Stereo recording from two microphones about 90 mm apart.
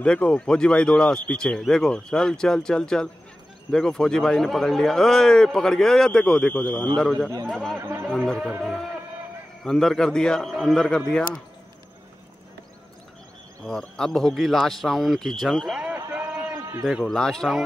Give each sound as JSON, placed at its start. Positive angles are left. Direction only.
{"t": 0.0, "sound": "a man's voice", "side_deg": 10}
{"t": 7.0, "sound": "a man's voice", "side_deg": 10}
{"t": 7.8, "sound": "speech", "side_deg": -30}
{"t": 8.4, "sound": "a man's voice", "side_deg": -5}
{"t": 9.7, "sound": "a man's voice", "side_deg": 5}
{"t": 13.7, "sound": "a man's voice", "side_deg": 5}
{"t": 17.0, "sound": "a man's voice", "side_deg": 5}